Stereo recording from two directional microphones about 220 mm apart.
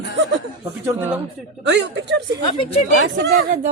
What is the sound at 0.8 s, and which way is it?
Speech, 10° right (ahead or behind).